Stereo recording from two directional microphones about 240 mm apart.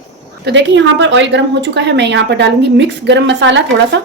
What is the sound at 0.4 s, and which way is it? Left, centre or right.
A woman's voice, right.